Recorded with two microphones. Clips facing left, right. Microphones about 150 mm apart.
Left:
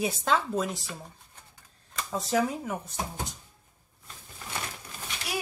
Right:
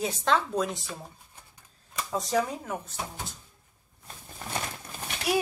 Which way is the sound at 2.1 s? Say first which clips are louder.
Left 1 dB; centre (ahead or behind).